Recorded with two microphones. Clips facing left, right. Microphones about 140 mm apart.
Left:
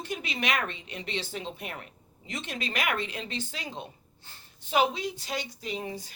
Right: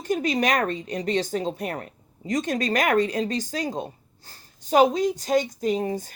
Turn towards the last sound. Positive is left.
turn(degrees=-45)  # may be behind; listen again after turning